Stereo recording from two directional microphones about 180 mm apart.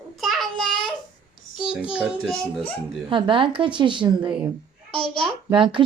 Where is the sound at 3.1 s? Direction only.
25° right (ahead or behind).